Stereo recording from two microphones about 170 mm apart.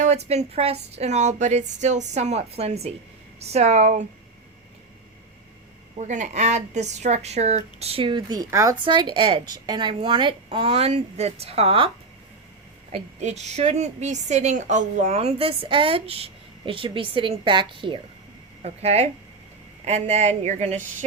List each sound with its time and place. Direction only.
0.0 s a woman's voice: 40° right (ahead or behind)
6.0 s a woman's voice: 45° right (ahead or behind)
12.9 s a woman's voice: 40° right (ahead or behind)